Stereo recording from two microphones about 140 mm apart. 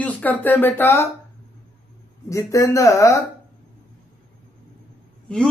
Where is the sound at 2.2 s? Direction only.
20° left (ahead or behind).